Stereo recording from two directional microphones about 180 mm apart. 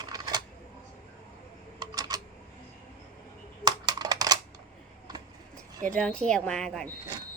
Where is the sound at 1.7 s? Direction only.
20° right (ahead or behind).